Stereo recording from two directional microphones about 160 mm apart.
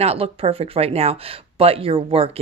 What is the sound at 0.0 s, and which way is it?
Speech, 40° right (ahead or behind).